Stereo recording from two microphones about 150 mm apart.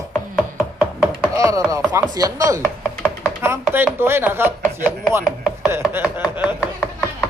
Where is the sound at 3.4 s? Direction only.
15° right (ahead or behind).